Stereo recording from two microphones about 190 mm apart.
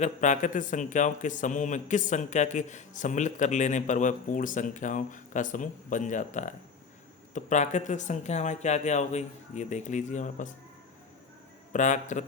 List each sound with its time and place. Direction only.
0.0 s a man's voice: 40° left (ahead or behind)
11.7 s a man's voice: 40° left (ahead or behind)